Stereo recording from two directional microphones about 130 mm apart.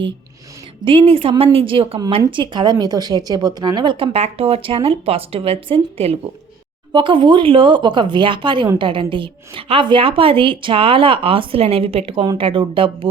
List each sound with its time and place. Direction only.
0.9 s speech: 45° right (ahead or behind)